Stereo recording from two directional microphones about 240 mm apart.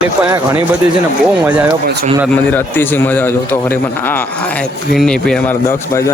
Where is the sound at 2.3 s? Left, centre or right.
Centre.